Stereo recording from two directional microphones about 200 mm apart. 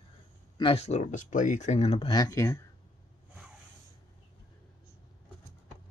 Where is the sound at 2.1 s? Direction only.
15° left (ahead or behind).